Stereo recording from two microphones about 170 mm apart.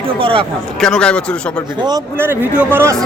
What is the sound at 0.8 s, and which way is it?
Speech, 5° left (ahead or behind).